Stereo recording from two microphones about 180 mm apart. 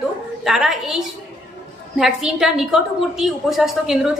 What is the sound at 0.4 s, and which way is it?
A woman's voice, centre (ahead or behind).